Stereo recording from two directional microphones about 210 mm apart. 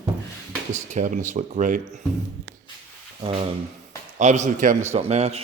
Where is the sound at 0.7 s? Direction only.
35° right (ahead or behind).